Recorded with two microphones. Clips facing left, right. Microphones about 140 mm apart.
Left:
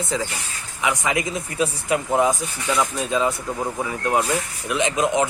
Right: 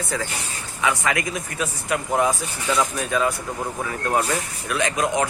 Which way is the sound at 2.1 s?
20° left (ahead or behind).